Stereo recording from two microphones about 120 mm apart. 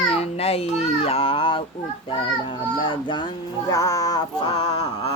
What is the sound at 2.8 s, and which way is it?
Mantra, 40° left (ahead or behind).